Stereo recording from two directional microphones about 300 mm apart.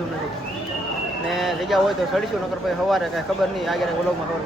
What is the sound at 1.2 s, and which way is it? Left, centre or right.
Speech, centre.